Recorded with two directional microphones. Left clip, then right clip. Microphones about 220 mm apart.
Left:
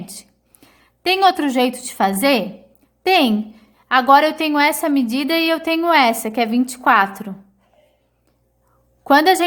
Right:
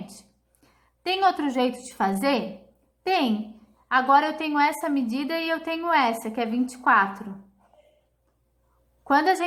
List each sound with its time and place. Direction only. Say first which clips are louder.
0.0 s a woman's voice: left 7 dB; 45° left (ahead or behind)
9.0 s a woman's voice: left 8 dB; 45° left (ahead or behind)